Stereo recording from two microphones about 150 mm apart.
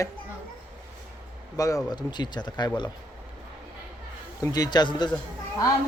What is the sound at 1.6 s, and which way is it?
Speech, 25° left (ahead or behind).